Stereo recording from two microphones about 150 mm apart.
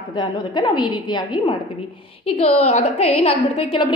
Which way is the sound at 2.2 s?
45° left (ahead or behind).